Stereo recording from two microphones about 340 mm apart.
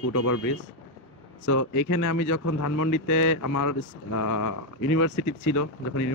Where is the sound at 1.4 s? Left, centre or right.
Left.